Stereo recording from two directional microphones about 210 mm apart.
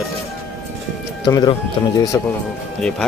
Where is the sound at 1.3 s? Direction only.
15° left (ahead or behind).